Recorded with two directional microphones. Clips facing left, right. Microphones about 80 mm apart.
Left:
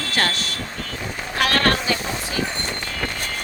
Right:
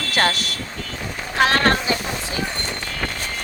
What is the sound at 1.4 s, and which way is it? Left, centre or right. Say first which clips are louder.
Speech: right 3 dB; right.